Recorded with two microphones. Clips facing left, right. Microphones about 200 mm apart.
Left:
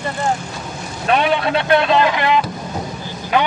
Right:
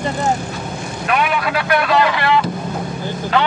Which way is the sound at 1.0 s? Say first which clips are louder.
Left 2 dB; 30° left (ahead or behind).